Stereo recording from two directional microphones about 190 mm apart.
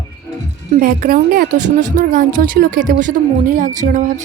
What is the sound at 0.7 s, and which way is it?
A woman's voice, 45° right (ahead or behind).